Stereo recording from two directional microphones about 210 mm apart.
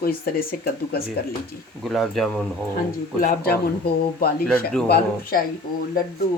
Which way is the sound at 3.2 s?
45° left (ahead or behind).